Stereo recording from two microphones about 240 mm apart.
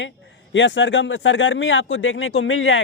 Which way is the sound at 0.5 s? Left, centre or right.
Left.